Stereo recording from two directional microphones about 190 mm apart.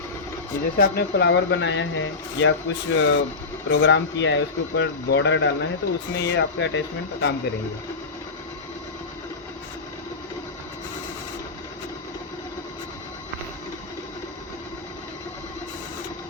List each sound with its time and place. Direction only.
0.8 s speech: 55° left (ahead or behind); by 3.2 s 90° left
3.7 s speech: 70° left (ahead or behind)